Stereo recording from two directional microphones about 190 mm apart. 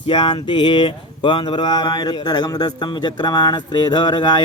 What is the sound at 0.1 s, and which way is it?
Speech, 25° left (ahead or behind).